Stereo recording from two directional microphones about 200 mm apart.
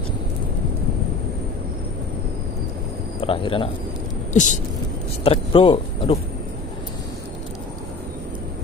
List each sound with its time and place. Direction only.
3.2 s speech: 25° left (ahead or behind)
4.3 s speech: 40° left (ahead or behind)